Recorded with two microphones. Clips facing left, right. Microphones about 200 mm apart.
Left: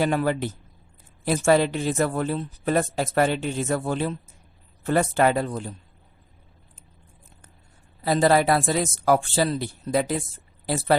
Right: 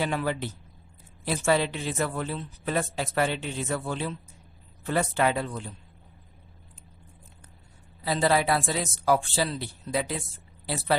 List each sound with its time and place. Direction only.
0.0 s speech: 45° left (ahead or behind)
8.0 s speech: 45° left (ahead or behind)